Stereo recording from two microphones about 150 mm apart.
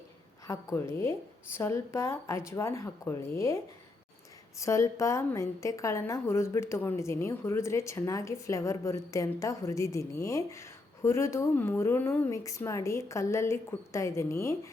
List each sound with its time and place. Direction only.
0.4 s a woman's voice: 20° left (ahead or behind)